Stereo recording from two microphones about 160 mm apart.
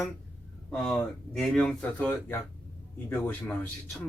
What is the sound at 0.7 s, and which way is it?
A man's voice, 5° left (ahead or behind).